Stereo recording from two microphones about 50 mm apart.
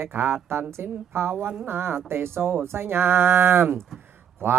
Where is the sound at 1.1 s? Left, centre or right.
Right.